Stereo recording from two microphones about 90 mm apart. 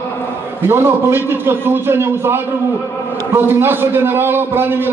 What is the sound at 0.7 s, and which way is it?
A man's voice, 25° right (ahead or behind).